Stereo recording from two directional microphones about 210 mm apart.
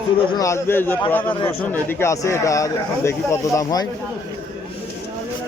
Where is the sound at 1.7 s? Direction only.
10° left (ahead or behind).